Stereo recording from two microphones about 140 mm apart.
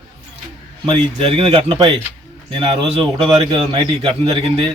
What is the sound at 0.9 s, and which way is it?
A man's voice, 40° right (ahead or behind).